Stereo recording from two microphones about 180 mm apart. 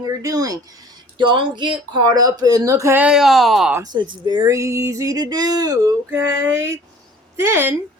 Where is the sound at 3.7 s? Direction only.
20° right (ahead or behind).